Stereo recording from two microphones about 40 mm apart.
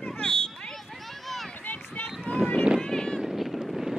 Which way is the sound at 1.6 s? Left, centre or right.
Left.